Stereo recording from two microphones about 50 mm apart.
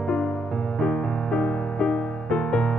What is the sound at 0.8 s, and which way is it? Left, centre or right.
Music, centre.